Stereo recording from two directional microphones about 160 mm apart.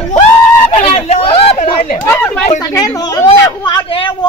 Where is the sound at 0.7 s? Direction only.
40° left (ahead or behind).